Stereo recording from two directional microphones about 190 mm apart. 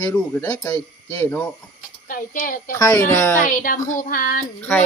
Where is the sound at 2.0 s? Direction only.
45° left (ahead or behind).